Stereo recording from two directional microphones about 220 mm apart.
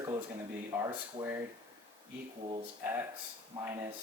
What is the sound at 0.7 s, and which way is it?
Speech, 10° right (ahead or behind).